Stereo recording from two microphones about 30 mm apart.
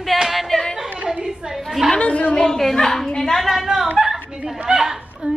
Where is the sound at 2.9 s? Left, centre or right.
Centre.